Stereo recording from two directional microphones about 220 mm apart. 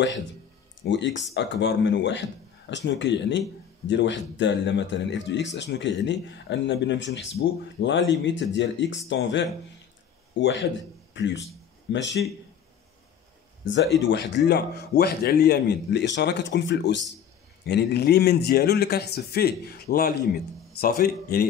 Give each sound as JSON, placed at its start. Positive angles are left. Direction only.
{"t": 0.8, "sound": "a man's voice", "side_deg": 55}
{"t": 13.7, "sound": "a man's voice", "side_deg": 55}